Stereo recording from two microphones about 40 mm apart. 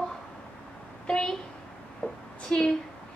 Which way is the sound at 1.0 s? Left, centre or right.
Left.